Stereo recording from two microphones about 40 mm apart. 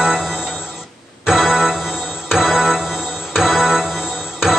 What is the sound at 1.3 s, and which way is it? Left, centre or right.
Music, centre.